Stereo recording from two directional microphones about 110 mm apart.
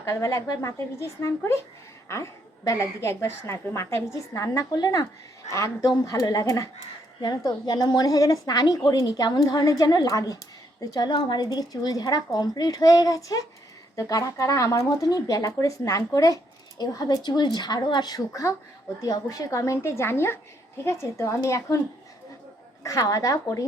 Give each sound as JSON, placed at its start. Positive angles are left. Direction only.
{"t": 0.0, "sound": "a woman's voice", "side_deg": 30}
{"t": 22.8, "sound": "speech", "side_deg": 30}